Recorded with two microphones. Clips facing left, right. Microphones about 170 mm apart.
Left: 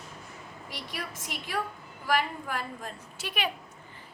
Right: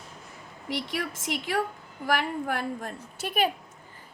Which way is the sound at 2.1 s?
60° right (ahead or behind).